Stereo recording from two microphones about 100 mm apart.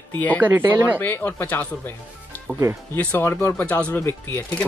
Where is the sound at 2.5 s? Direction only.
20° right (ahead or behind).